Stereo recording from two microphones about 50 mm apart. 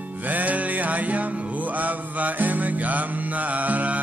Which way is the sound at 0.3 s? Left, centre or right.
Right.